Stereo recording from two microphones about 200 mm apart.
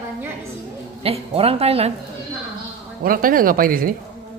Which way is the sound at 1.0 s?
30° right (ahead or behind).